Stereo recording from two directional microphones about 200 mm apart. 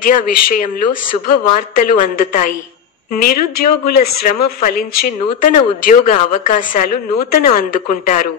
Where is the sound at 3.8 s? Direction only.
50° left (ahead or behind).